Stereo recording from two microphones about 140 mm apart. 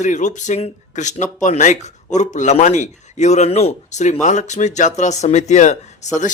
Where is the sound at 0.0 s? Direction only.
60° left (ahead or behind).